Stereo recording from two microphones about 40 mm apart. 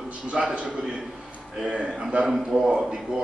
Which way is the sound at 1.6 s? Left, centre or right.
Right.